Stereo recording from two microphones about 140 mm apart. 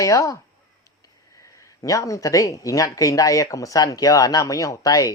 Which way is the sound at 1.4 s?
20° left (ahead or behind).